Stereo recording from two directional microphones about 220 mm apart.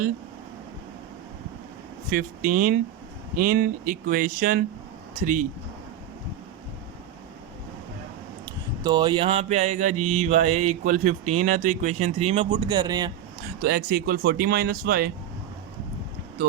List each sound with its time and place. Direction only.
2.0 s mantra: 40° right (ahead or behind)
8.4 s mantra: 20° right (ahead or behind)
13.6 s speech: 45° right (ahead or behind)